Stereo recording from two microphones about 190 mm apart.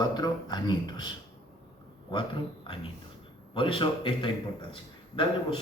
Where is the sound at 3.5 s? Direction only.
25° left (ahead or behind).